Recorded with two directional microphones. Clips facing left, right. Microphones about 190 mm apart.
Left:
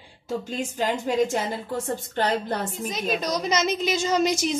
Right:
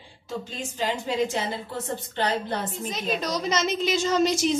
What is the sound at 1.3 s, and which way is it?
A woman's voice, 45° left (ahead or behind).